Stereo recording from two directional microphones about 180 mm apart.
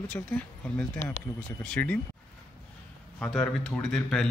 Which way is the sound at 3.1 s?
5° left (ahead or behind).